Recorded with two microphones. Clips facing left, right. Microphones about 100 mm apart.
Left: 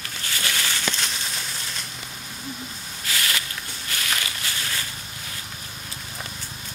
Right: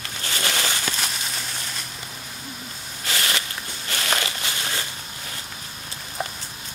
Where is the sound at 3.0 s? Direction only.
30° right (ahead or behind).